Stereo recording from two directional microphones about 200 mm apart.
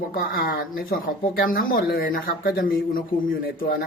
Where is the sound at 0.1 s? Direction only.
45° left (ahead or behind).